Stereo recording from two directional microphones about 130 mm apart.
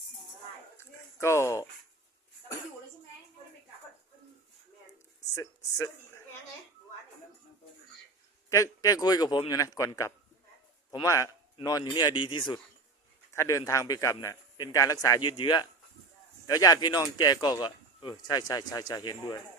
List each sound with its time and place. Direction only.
0.8 s a sound: 20° left (ahead or behind)
5.3 s speech: 25° left (ahead or behind)
8.4 s speech: 25° left (ahead or behind)
13.3 s speech: 25° left (ahead or behind)
15.2 s speech: 35° left (ahead or behind)